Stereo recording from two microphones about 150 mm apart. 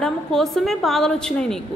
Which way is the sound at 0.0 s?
5° left (ahead or behind).